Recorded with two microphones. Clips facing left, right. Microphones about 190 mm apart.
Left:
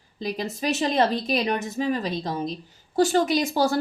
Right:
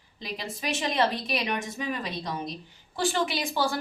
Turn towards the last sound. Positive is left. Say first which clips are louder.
# left 7 dB
turn(degrees=40)  # may be behind; listen again after turning